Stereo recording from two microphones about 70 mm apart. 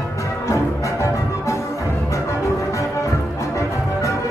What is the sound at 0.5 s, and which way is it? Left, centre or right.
Music, left.